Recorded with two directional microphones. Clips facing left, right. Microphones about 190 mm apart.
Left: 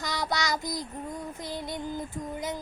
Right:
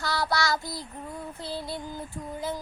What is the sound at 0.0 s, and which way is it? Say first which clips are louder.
Child singing: right 3 dB; 20° left (ahead or behind).